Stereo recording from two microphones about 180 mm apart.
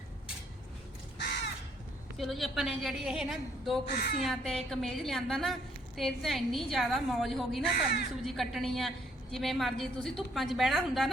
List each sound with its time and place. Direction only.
1.2 s crow: 70° left (ahead or behind)
2.1 s a woman's voice: centre (ahead or behind)
3.8 s speech: 65° left (ahead or behind)
4.2 s a woman's voice: centre (ahead or behind)